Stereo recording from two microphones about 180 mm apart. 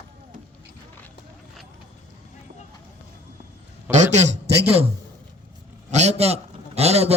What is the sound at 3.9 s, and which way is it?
Speech, 40° right (ahead or behind).